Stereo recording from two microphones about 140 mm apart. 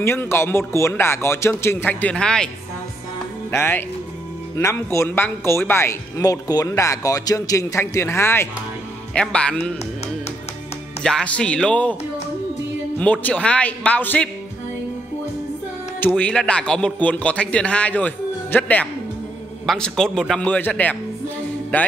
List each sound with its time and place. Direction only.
0.0 s a man's voice: 15° left (ahead or behind)
3.5 s a man's voice: 15° left (ahead or behind)
11.0 s a man's voice: 5° left (ahead or behind)
13.0 s a man's voice: 10° left (ahead or behind)
16.0 s a man's voice: 10° left (ahead or behind)